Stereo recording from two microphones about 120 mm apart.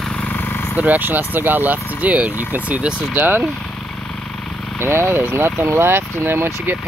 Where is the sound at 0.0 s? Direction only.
10° left (ahead or behind).